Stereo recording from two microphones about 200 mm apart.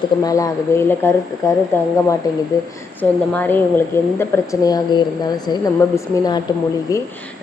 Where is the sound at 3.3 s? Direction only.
10° left (ahead or behind).